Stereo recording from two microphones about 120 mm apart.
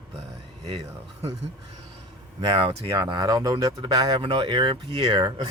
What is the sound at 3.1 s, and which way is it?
Speech, 35° right (ahead or behind).